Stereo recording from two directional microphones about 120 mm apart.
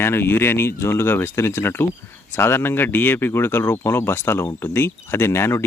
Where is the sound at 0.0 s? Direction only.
20° left (ahead or behind).